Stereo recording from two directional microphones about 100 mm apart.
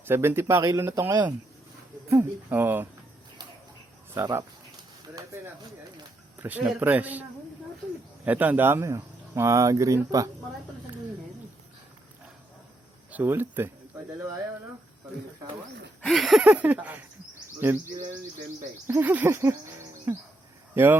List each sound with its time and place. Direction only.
0.1 s speech: 25° right (ahead or behind)
4.1 s speech: 20° right (ahead or behind)
6.4 s a man's voice: 15° right (ahead or behind); by 10.2 s 35° right (ahead or behind)
13.1 s speech: 20° right (ahead or behind)
16.0 s a sound: centre (ahead or behind)
16.5 s a man's voice: 15° right (ahead or behind)